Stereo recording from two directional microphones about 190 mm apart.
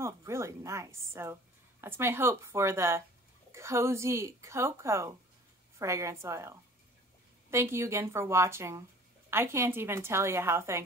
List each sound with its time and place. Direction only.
0.0 s speech: 15° right (ahead or behind)